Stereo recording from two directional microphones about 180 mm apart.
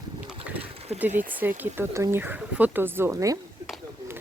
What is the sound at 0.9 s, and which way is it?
Speech, 10° right (ahead or behind).